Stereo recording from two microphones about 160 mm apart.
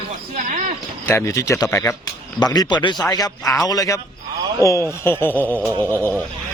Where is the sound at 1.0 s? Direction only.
15° left (ahead or behind).